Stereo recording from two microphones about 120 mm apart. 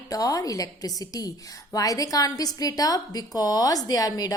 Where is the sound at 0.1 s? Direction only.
30° left (ahead or behind).